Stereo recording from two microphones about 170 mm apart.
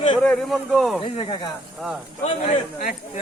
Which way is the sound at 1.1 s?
30° left (ahead or behind).